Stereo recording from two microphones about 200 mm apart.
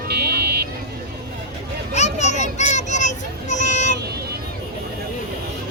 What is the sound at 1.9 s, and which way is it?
Children playing, 35° left (ahead or behind).